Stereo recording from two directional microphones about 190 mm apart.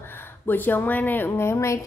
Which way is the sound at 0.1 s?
10° left (ahead or behind).